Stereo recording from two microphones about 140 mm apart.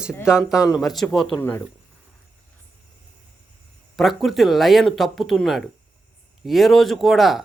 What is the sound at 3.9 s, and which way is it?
Speech, centre (ahead or behind).